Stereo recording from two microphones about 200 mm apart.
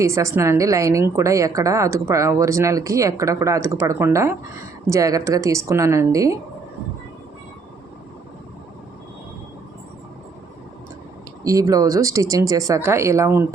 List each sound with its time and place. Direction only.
0.0 s a woman's voice: 15° right (ahead or behind)
11.4 s a woman's voice: 15° right (ahead or behind)